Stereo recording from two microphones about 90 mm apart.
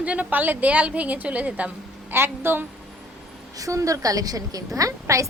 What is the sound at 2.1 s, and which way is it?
Speech, 25° right (ahead or behind).